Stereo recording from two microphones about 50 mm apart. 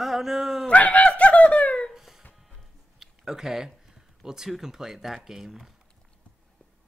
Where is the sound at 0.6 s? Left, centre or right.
Left.